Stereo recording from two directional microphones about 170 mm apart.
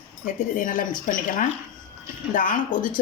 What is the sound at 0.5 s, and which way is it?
A woman's voice, 50° left (ahead or behind).